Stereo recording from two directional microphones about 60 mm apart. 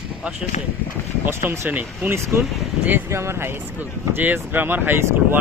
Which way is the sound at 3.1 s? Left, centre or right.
Right.